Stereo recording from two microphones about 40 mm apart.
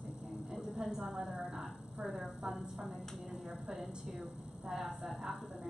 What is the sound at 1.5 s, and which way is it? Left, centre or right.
A woman's voice, right.